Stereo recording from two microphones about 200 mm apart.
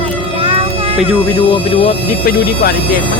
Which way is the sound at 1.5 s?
30° left (ahead or behind).